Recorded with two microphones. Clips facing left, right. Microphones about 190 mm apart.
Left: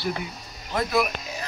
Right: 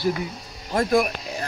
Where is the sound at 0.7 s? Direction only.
45° right (ahead or behind).